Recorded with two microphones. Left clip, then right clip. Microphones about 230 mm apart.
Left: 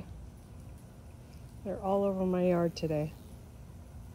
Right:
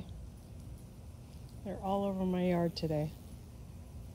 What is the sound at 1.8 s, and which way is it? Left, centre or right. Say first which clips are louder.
Speech: left 5 dB; left.